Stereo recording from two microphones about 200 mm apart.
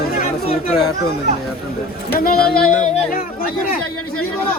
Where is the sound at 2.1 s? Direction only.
50° left (ahead or behind).